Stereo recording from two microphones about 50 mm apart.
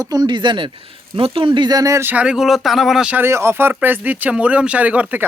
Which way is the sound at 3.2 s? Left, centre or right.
Right.